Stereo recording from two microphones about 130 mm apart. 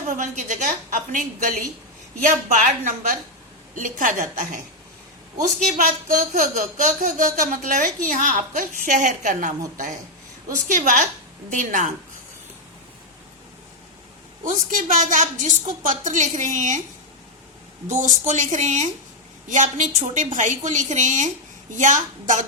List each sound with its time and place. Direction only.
0.1 s a woman's voice: 75° right (ahead or behind)
1.4 s a woman's voice: 90° right
2.2 s a woman's voice: 70° right (ahead or behind)
5.7 s a woman's voice: 90° right
14.4 s a woman's voice: 80° right
17.8 s a woman's voice: 75° right (ahead or behind)